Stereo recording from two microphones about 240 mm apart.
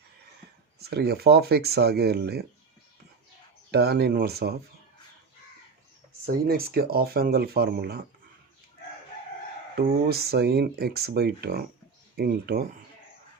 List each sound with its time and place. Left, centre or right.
0.8 s speech: right
3.7 s speech: right
6.2 s speech: right
9.7 s speech: right